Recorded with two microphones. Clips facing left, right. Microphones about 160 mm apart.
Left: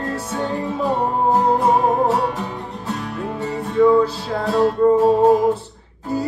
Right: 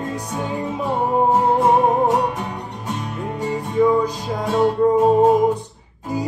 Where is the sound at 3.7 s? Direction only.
15° right (ahead or behind).